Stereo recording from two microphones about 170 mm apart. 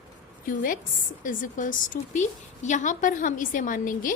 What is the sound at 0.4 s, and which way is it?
A woman's voice, 55° left (ahead or behind).